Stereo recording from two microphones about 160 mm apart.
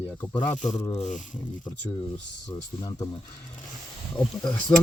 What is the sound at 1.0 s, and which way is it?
Speech, 50° left (ahead or behind).